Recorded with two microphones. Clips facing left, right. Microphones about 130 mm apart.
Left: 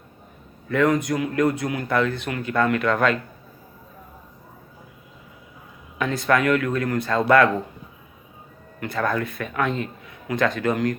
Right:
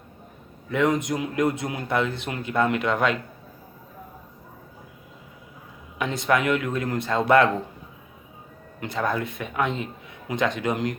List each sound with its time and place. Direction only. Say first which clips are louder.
0.7 s a man's voice: left 2 dB; 20° right (ahead or behind)
6.0 s a man's voice: left 2 dB; 20° right (ahead or behind)
8.8 s a man's voice: left 2 dB; 20° right (ahead or behind)